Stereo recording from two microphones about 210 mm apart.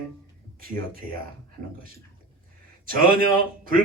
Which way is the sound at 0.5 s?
45° right (ahead or behind).